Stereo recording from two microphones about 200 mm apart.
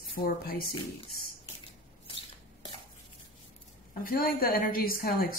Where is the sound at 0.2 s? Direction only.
50° left (ahead or behind).